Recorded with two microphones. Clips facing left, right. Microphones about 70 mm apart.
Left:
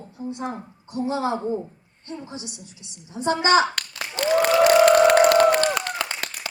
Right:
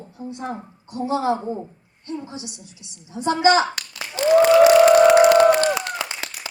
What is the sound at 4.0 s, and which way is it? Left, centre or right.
Applause, left.